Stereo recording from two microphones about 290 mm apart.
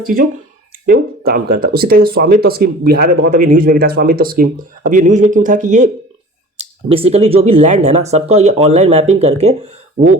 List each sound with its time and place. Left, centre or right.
0.9 s speech: right